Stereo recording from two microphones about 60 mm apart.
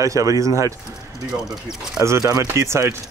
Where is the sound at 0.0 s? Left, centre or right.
Right.